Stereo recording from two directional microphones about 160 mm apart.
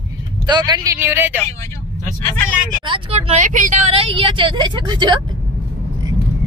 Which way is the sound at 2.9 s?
40° right (ahead or behind).